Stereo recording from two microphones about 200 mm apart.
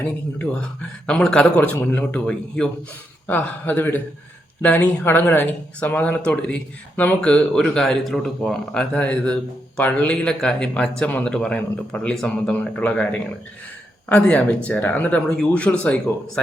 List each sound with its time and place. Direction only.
0.3 s speech: 5° left (ahead or behind)